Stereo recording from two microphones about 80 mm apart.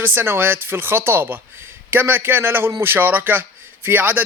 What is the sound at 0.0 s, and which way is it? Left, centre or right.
Speech, right.